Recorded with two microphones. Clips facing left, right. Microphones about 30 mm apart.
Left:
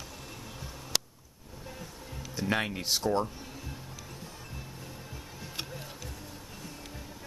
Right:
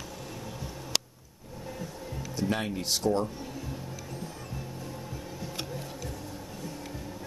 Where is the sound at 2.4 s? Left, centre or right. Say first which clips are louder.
Left 1 dB; centre.